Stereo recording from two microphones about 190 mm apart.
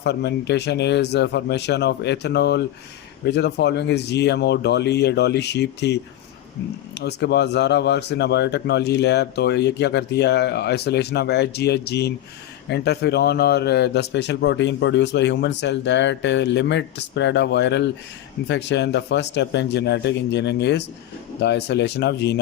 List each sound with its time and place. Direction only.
0.0 s speech: 60° left (ahead or behind)
7.0 s a man's voice: 60° left (ahead or behind)